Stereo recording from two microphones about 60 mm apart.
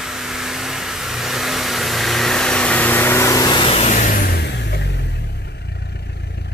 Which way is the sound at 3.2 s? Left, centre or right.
Left.